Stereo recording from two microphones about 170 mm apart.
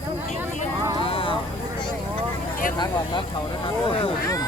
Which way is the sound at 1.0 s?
30° left (ahead or behind).